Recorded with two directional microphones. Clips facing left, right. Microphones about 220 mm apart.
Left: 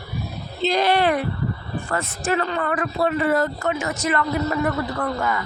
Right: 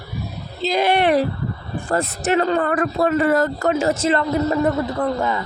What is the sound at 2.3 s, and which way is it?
Speech, 35° right (ahead or behind).